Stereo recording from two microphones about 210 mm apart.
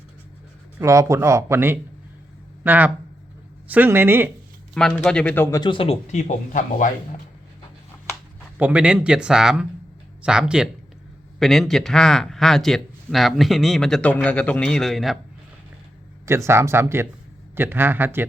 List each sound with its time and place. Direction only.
0.8 s speech: 15° right (ahead or behind)
4.7 s speech: 5° left (ahead or behind); by 6.9 s 40° left (ahead or behind)
8.5 s speech: 5° right (ahead or behind)
16.2 s speech: 15° right (ahead or behind)